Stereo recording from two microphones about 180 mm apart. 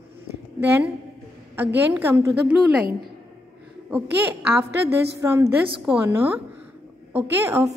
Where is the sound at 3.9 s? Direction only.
10° right (ahead or behind).